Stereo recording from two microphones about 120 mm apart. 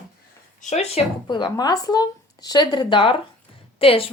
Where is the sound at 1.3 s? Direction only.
35° left (ahead or behind).